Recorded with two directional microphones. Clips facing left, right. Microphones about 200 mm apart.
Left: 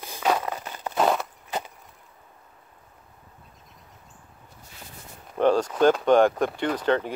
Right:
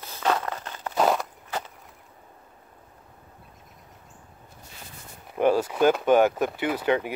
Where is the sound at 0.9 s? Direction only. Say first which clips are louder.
Even; centre (ahead or behind).